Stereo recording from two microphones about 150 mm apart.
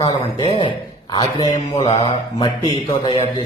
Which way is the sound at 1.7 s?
40° left (ahead or behind).